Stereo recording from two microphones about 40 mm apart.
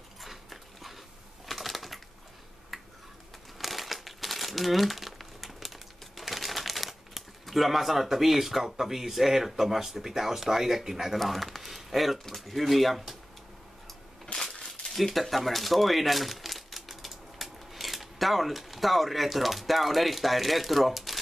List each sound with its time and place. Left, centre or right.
0.2 s a sound: centre
1.4 s typing: centre
2.7 s a sound: centre
3.5 s crumpling: centre
11.1 s speech: centre
14.2 s crushing: centre
15.0 s speech: centre